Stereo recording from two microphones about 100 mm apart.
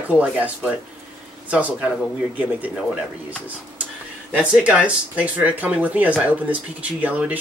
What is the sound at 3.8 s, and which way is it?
Speech, 10° right (ahead or behind).